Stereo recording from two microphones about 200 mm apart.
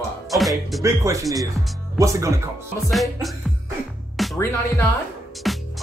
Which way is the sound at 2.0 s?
15° right (ahead or behind).